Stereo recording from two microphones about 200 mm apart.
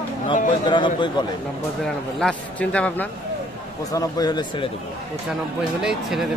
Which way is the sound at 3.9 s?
20° left (ahead or behind).